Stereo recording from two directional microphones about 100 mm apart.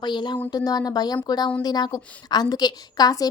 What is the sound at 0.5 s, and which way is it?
Speech, 40° left (ahead or behind).